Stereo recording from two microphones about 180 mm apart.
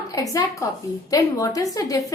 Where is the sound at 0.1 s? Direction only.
20° left (ahead or behind).